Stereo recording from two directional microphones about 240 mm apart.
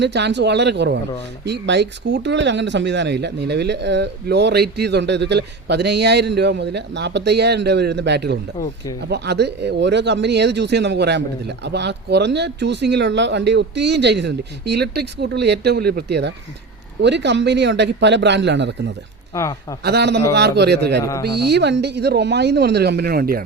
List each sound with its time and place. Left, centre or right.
0.0 s speech: right
19.3 s speech: centre
19.8 s speech: right
21.0 s a man's voice: centre
21.2 s speech: right